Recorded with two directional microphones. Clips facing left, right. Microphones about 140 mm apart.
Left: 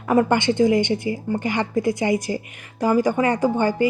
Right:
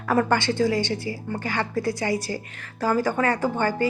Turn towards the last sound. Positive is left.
turn(degrees=15)  # may be behind; listen again after turning